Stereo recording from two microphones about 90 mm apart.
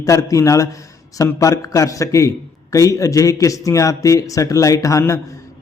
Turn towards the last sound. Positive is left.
turn(degrees=35)  # may be behind; listen again after turning